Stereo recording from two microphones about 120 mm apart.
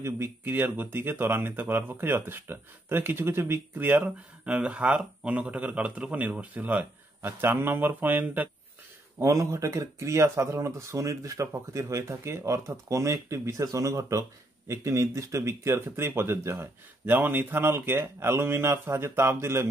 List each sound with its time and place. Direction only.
0.0 s speech: 20° right (ahead or behind)
9.2 s speech: 25° right (ahead or behind)